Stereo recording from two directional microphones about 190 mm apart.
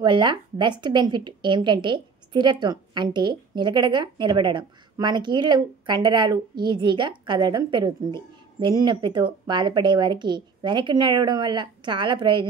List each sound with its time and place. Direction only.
0.0 s a woman's voice: 25° right (ahead or behind)